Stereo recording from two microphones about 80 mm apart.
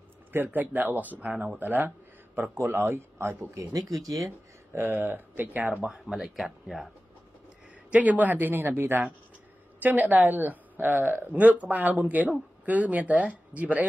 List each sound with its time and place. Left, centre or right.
0.3 s speech: right
1.6 s speech: right
3.7 s speech: right
4.7 s speech: right
5.9 s speech: centre
7.9 s speech: centre